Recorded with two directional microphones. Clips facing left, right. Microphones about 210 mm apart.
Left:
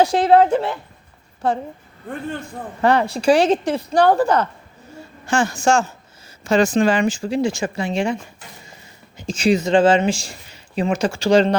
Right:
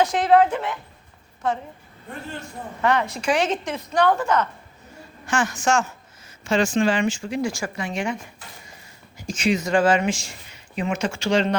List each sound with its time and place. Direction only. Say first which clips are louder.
0.0 s speech: left 3 dB; 30° left (ahead or behind)
2.8 s a woman's voice: left 6 dB; 30° left (ahead or behind)
9.1 s speech: left 5 dB; 25° left (ahead or behind)